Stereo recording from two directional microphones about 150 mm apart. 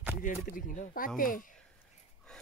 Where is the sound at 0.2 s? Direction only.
65° left (ahead or behind).